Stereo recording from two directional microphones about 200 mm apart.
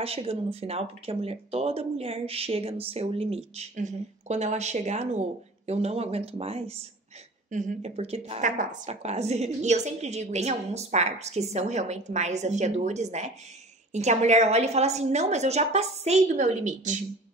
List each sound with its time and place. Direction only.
0.0 s speech: 30° right (ahead or behind)